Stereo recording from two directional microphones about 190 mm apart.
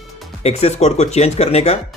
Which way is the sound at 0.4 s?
35° left (ahead or behind).